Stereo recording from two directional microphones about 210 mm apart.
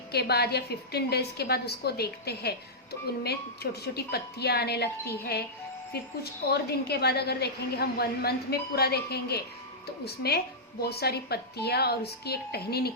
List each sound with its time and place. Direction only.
0.1 s a woman's voice: 50° left (ahead or behind)
6.5 s a woman's voice: 50° left (ahead or behind)